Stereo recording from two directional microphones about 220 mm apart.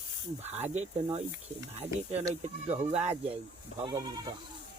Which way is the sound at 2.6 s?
30° right (ahead or behind).